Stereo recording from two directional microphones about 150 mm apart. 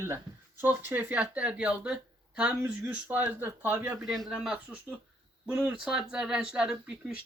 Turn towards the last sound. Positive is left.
turn(degrees=-5)  # may be behind; listen again after turning